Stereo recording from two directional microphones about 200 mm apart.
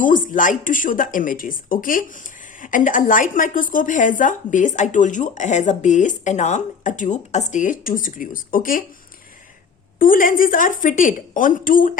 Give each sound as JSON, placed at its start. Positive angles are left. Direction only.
{"t": 0.0, "sound": "speech", "side_deg": 40}
{"t": 10.0, "sound": "speech", "side_deg": 45}